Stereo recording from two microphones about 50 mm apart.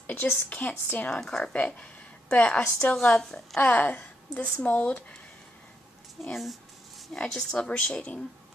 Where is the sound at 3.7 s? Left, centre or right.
Left.